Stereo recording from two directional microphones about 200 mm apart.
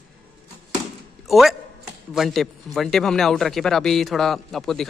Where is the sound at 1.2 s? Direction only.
Centre (ahead or behind).